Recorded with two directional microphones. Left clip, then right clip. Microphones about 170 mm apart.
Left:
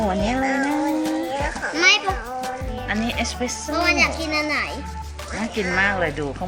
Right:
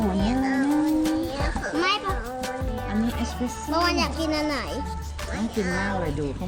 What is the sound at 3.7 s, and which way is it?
Speech, 90° right.